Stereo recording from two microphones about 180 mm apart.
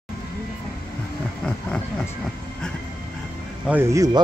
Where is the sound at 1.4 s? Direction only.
5° left (ahead or behind).